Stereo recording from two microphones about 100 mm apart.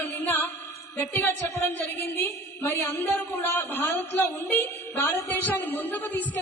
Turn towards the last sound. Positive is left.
turn(degrees=20)  # may be behind; listen again after turning